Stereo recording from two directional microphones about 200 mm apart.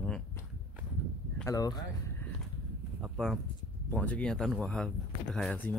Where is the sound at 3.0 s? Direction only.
Centre (ahead or behind).